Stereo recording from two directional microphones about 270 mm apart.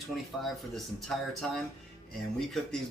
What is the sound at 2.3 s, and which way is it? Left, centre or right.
Speech, centre.